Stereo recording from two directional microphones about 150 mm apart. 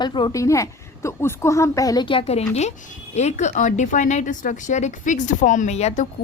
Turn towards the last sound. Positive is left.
turn(degrees=50)  # may be behind; listen again after turning